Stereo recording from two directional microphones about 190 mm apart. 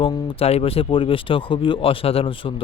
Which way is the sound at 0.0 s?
30° left (ahead or behind).